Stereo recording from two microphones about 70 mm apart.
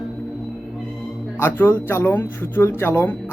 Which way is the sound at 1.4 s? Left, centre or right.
Left.